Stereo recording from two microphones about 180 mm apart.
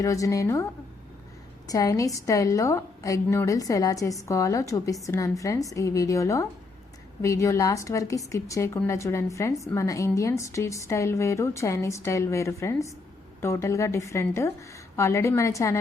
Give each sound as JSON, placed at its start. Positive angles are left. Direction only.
{"t": 0.0, "sound": "a woman's voice", "side_deg": 20}